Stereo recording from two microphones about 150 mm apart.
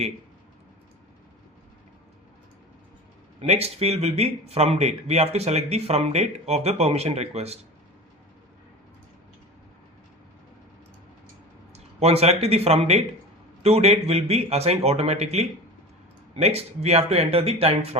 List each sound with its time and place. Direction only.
3.4 s speech: 45° right (ahead or behind)
11.7 s speech: 45° right (ahead or behind)